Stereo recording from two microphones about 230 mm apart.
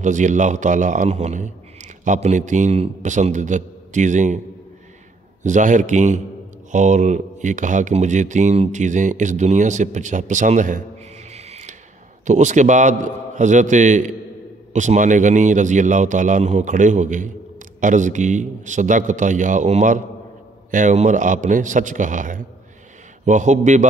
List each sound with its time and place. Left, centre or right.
0.0 s a man's voice: right
5.4 s a man's voice: right
11.2 s a sound: right
12.3 s a man's voice: right